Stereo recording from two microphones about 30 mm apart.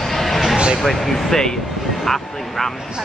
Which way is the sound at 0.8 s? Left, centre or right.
Centre.